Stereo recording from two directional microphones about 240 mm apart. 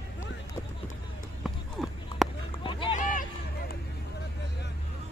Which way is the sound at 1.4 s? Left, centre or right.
Centre.